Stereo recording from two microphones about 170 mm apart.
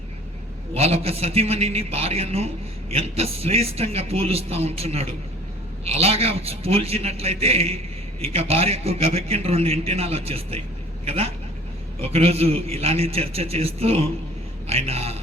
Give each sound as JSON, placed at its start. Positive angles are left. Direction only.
{"t": 0.7, "sound": "a man's voice", "side_deg": -35}